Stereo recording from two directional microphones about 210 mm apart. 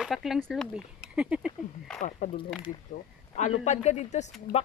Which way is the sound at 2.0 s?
35° left (ahead or behind).